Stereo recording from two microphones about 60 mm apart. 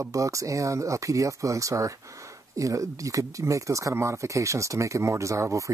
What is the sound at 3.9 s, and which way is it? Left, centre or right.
Speech, right.